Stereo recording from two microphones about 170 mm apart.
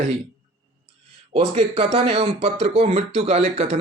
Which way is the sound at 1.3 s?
35° right (ahead or behind).